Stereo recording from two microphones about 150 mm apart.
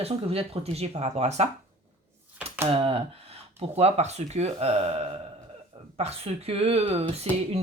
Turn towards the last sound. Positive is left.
turn(degrees=-45)  # may be behind; listen again after turning